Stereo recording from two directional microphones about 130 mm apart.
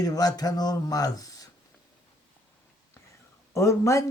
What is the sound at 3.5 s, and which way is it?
Speech, 25° left (ahead or behind).